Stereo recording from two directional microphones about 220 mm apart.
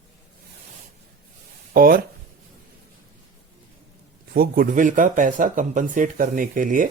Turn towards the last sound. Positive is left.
turn(degrees=-35)  # may be behind; listen again after turning